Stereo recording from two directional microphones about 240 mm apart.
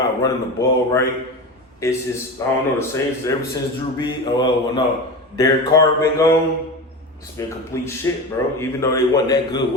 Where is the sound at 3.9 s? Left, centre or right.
Centre.